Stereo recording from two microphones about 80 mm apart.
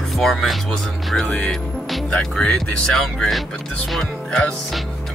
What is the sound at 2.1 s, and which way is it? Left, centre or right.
Speech, centre.